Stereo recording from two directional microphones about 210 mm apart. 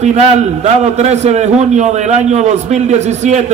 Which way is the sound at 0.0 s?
35° right (ahead or behind).